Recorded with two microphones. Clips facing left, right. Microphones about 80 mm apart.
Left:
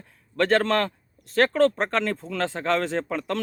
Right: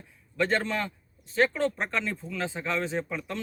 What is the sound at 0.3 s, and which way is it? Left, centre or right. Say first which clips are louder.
Speech: left 6 dB; left.